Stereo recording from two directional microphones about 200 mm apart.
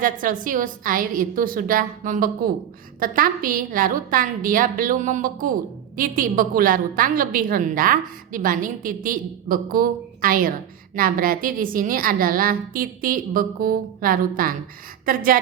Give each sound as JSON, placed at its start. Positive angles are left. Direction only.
{"t": 0.0, "sound": "a woman's voice", "side_deg": -40}